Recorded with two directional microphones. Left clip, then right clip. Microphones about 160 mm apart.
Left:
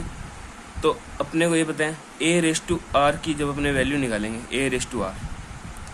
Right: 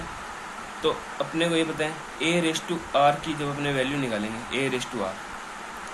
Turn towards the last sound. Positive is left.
turn(degrees=55)  # may be behind; listen again after turning